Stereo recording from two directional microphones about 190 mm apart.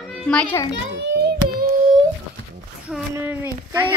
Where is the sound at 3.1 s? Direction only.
10° right (ahead or behind).